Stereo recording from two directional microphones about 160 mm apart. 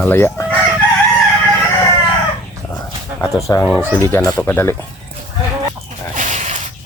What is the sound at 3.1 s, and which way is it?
Dog, 15° right (ahead or behind).